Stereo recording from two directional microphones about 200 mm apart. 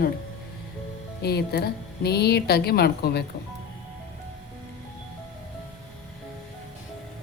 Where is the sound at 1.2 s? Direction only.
55° left (ahead or behind).